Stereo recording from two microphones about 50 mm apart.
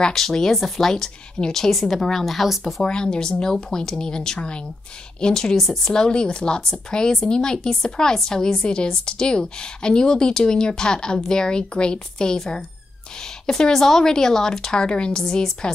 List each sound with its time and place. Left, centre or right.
0.0 s speech: centre
2.6 s speech: centre